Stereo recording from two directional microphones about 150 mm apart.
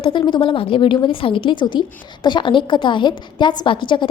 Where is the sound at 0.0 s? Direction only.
35° left (ahead or behind).